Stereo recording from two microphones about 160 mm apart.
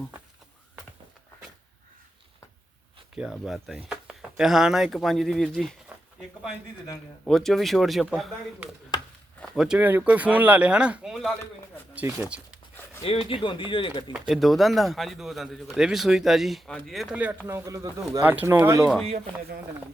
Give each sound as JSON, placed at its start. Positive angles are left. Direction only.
{"t": 3.2, "sound": "speech", "side_deg": -5}
{"t": 7.3, "sound": "speech", "side_deg": 0}
{"t": 8.9, "sound": "chopping", "side_deg": 25}
{"t": 9.4, "sound": "speech", "side_deg": -5}
{"t": 13.0, "sound": "speech", "side_deg": 40}
{"t": 14.1, "sound": "speech", "side_deg": 0}
{"t": 17.4, "sound": "speech", "side_deg": -20}
{"t": 19.0, "sound": "speech", "side_deg": -40}